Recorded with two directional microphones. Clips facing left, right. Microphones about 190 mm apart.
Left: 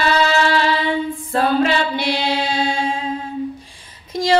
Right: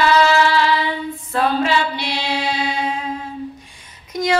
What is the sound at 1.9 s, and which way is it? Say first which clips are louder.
Mantra: left 4 dB; 50° left (ahead or behind).